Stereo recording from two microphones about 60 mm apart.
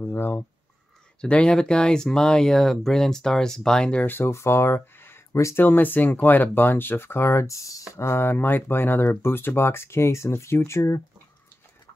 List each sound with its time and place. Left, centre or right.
0.0 s speech: left
1.2 s speech: centre
4.0 s speech: left
4.3 s speech: left
5.3 s speech: left
5.6 s speech: left
7.9 s speech: left